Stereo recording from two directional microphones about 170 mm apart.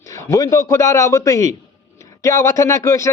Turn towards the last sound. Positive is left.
turn(degrees=20)  # may be behind; listen again after turning